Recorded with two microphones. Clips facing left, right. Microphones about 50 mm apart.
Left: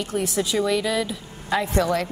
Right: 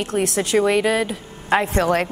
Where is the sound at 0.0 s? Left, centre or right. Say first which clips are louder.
Right 4 dB; right.